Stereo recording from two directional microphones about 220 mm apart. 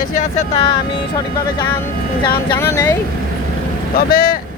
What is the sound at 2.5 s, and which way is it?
Speech, 15° left (ahead or behind).